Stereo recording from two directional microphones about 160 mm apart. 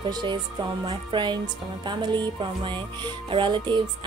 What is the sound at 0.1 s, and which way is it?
A woman's voice, 30° right (ahead or behind).